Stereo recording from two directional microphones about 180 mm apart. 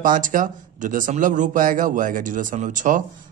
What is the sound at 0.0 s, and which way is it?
Speech, 45° right (ahead or behind).